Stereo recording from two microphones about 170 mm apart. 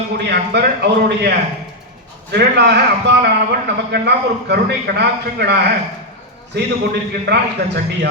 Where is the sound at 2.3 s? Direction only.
75° right (ahead or behind).